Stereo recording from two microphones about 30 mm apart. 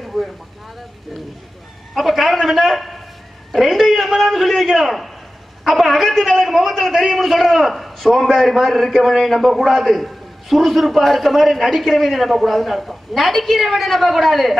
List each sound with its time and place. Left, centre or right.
0.0 s vehicle: centre
2.0 s a sound: centre
2.4 s a man's voice: centre
9.0 s a man's voice: centre
9.7 s a man's voice: centre